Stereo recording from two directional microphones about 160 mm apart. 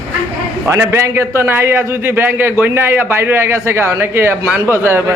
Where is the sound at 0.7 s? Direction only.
15° right (ahead or behind).